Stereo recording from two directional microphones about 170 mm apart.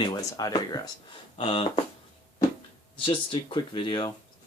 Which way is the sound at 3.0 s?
30° left (ahead or behind).